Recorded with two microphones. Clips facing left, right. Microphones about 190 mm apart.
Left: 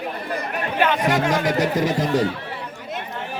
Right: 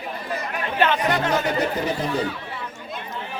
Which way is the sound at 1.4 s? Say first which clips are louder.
Left 3 dB; 90° left.